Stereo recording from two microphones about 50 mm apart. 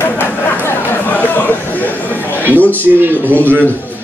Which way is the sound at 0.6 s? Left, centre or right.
Left.